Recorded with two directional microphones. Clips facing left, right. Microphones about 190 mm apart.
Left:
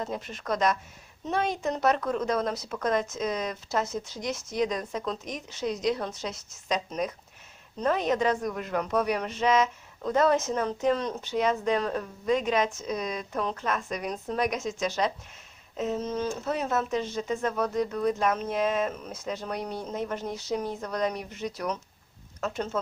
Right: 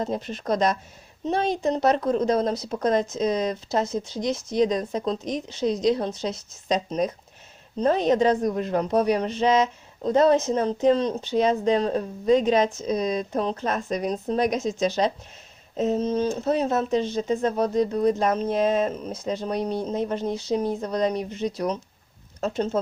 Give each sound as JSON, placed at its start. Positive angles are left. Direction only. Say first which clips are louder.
{"t": 0.0, "sound": "a woman's voice", "louder": "right 6 dB", "side_deg": -30}